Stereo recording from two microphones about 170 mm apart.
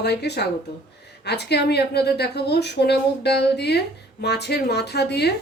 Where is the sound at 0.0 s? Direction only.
75° left (ahead or behind).